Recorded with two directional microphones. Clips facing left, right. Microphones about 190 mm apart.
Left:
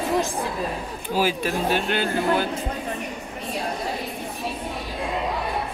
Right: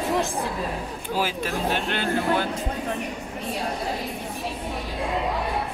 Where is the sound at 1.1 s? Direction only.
10° left (ahead or behind).